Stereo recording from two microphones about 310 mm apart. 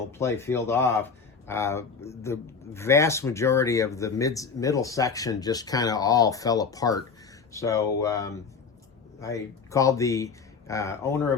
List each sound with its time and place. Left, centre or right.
0.1 s speech: centre